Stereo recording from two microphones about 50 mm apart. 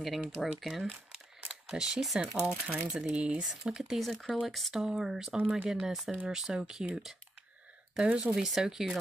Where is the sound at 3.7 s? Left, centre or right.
Centre.